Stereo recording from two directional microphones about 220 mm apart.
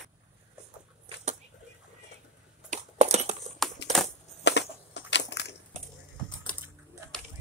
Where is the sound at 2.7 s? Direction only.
30° right (ahead or behind).